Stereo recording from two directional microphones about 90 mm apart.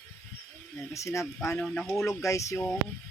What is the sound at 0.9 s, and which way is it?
Speech, 35° left (ahead or behind).